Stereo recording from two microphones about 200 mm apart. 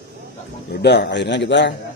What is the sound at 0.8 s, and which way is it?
Speech, 55° left (ahead or behind).